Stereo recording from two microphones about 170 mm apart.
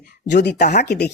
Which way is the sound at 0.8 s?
75° left (ahead or behind).